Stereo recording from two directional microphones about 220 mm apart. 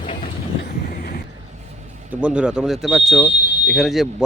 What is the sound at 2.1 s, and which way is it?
Speech, 5° right (ahead or behind).